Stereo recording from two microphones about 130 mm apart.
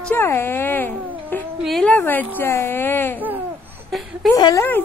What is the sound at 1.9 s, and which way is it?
A woman's voice, 15° left (ahead or behind).